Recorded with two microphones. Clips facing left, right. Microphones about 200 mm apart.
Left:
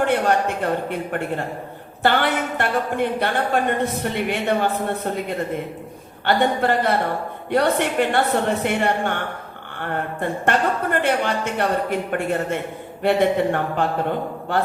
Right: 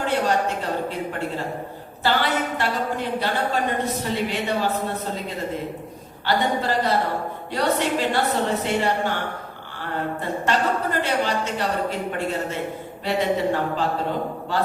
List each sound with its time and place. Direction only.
0.0 s a woman's voice: 55° left (ahead or behind)
2.0 s a woman's voice: 60° left (ahead or behind)